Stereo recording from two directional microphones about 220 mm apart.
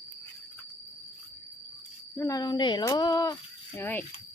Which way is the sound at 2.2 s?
15° left (ahead or behind).